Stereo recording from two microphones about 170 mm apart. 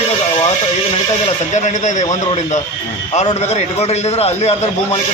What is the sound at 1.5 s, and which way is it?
A man's voice, 45° left (ahead or behind).